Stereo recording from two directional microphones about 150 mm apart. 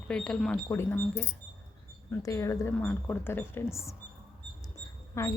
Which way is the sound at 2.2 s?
20° left (ahead or behind).